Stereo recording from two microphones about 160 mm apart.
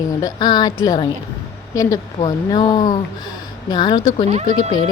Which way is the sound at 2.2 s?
35° left (ahead or behind).